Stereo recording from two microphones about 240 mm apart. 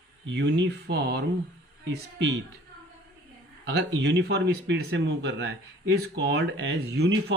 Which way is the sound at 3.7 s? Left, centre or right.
Right.